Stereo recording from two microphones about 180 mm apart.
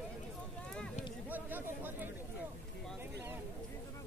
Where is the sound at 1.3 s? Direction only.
10° right (ahead or behind).